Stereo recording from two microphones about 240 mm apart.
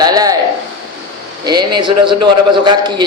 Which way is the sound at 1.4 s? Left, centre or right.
Centre.